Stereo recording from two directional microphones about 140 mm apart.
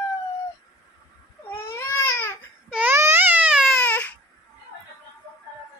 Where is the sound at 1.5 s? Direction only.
15° left (ahead or behind).